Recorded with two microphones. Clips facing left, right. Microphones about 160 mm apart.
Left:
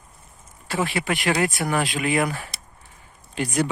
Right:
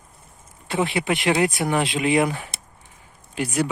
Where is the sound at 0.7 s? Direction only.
20° right (ahead or behind).